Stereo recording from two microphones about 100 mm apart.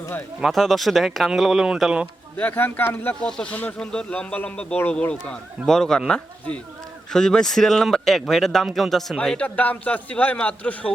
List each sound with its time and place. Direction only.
0.4 s speech: centre (ahead or behind)
2.4 s a man's voice: 20° left (ahead or behind)